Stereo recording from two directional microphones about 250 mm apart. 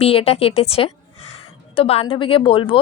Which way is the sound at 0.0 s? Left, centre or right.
Left.